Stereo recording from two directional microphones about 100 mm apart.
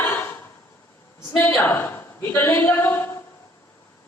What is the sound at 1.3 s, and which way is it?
A woman's voice, 20° left (ahead or behind).